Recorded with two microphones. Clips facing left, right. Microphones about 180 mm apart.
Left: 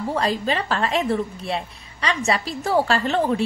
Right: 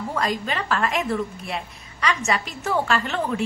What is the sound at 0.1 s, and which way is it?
A woman's voice, 30° left (ahead or behind).